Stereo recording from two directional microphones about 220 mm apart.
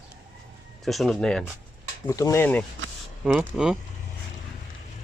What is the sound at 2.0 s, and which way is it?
Speech, 15° left (ahead or behind).